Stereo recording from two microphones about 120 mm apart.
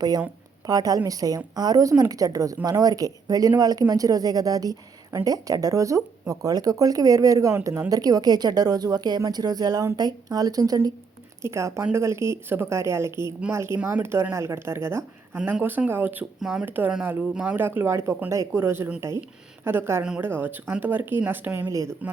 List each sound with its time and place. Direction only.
0.7 s speech: 30° right (ahead or behind)
16.4 s speech: 5° right (ahead or behind)
16.6 s speech: 15° right (ahead or behind)